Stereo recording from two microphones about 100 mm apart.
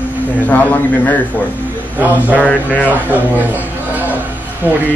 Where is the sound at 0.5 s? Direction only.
15° left (ahead or behind).